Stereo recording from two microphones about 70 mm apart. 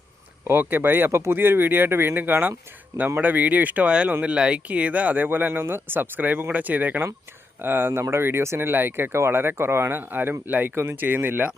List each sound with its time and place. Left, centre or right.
0.4 s speech: right